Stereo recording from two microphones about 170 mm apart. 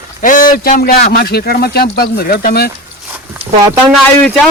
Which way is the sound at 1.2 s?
65° left (ahead or behind).